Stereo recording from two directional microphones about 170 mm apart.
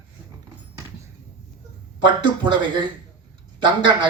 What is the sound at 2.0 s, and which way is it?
Speech, 25° right (ahead or behind).